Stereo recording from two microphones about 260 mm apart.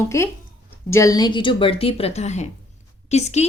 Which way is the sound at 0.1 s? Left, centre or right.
Centre.